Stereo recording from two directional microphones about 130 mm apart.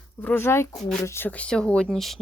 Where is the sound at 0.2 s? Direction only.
20° left (ahead or behind).